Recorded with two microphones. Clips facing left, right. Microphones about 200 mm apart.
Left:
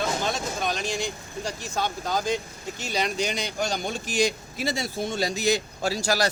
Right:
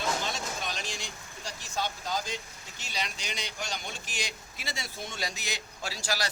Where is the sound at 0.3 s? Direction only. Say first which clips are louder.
Left 8 dB; 50° left (ahead or behind).